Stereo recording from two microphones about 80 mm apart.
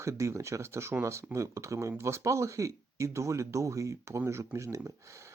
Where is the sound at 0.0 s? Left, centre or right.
Right.